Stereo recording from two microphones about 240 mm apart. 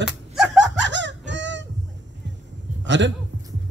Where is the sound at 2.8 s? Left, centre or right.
Right.